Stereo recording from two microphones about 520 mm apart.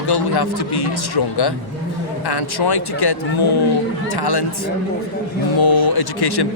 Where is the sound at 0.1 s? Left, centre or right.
Left.